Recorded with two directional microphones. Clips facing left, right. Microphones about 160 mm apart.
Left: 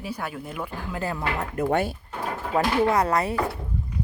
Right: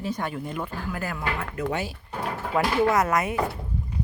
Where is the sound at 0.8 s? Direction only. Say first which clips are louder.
Left 5 dB; 25° left (ahead or behind).